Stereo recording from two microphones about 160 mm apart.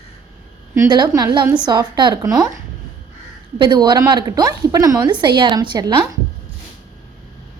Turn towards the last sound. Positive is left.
turn(degrees=-25)  # may be behind; listen again after turning